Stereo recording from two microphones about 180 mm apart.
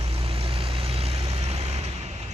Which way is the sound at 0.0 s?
30° right (ahead or behind).